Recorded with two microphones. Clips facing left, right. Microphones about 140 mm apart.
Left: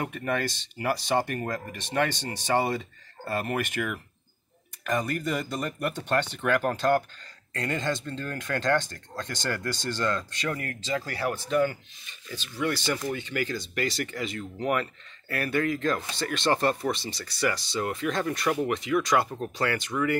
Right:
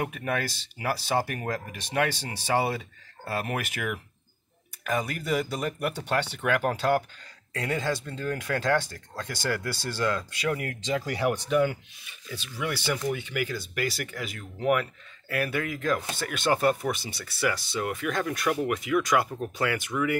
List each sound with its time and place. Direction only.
0.0 s speech: 10° right (ahead or behind)